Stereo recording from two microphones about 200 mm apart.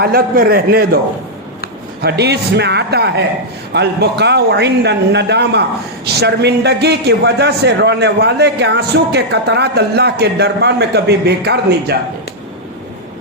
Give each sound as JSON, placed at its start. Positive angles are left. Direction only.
{"t": 0.0, "sound": "a man's voice", "side_deg": -50}
{"t": 2.0, "sound": "a man's voice", "side_deg": -55}